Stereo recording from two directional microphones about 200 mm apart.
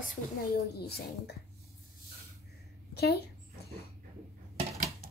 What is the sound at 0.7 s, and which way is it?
Speech, 55° left (ahead or behind).